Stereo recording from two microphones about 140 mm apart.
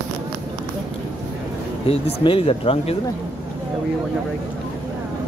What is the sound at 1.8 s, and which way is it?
Speech, 40° left (ahead or behind).